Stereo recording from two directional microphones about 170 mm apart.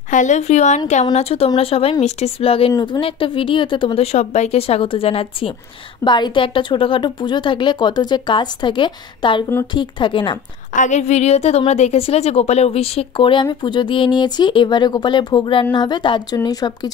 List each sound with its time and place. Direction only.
0.1 s a woman's voice: 45° left (ahead or behind); by 10.3 s 30° left (ahead or behind)
10.7 s a woman's voice: 45° left (ahead or behind); by 16.9 s 20° left (ahead or behind)